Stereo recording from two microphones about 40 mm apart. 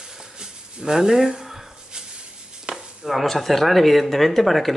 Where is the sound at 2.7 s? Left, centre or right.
Right.